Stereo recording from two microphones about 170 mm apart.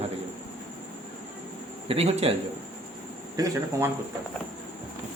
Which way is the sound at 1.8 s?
35° right (ahead or behind).